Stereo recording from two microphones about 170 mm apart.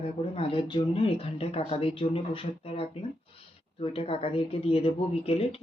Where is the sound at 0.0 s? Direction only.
30° left (ahead or behind).